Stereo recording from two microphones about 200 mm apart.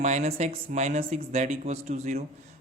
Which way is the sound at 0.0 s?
30° right (ahead or behind).